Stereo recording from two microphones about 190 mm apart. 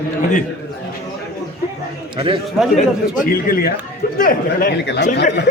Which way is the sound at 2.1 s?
25° right (ahead or behind).